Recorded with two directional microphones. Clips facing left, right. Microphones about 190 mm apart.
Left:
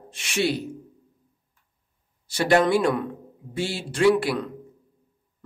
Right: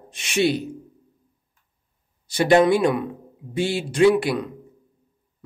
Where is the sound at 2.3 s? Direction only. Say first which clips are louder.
Right 4 dB; 20° right (ahead or behind).